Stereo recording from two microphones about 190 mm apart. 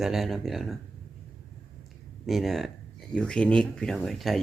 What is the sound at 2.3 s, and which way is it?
Speech, centre (ahead or behind).